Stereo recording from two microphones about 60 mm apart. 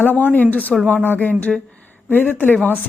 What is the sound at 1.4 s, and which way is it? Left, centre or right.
Speech, left.